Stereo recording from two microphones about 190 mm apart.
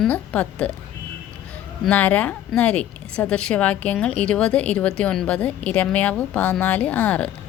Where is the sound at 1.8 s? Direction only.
5° left (ahead or behind).